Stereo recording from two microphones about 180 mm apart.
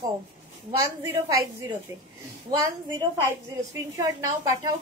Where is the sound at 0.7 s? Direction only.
15° right (ahead or behind).